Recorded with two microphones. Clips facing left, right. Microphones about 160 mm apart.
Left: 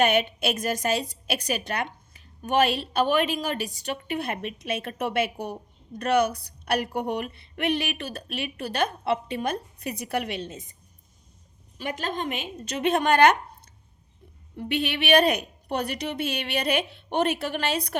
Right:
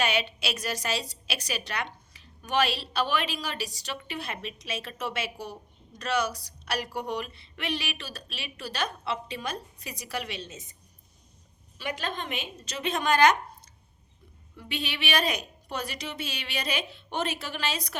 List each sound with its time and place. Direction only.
0.0 s a woman's voice: 55° left (ahead or behind)
11.8 s a woman's voice: 45° left (ahead or behind)
14.5 s a woman's voice: 55° left (ahead or behind)